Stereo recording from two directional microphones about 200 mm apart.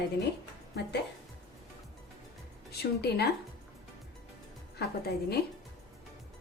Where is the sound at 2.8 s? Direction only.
55° left (ahead or behind).